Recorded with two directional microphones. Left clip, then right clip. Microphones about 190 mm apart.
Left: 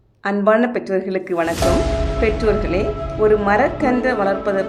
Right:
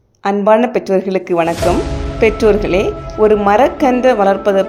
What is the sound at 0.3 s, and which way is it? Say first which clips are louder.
Speech: right 5 dB; 20° right (ahead or behind).